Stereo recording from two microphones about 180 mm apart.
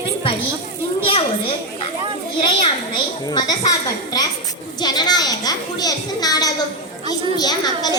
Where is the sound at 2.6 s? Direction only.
25° left (ahead or behind).